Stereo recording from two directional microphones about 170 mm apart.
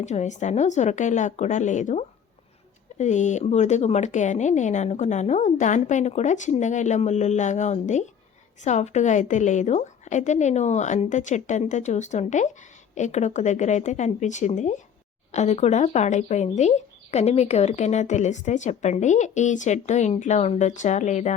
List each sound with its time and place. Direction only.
0.0 s a woman's voice: 45° left (ahead or behind)